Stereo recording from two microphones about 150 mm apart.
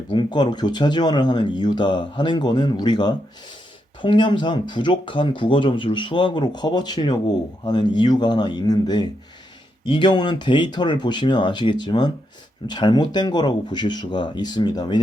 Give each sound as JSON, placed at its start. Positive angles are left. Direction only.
{"t": 0.1, "sound": "speech", "side_deg": 30}